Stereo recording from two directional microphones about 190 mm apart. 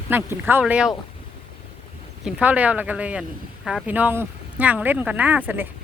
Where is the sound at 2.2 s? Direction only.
5° right (ahead or behind).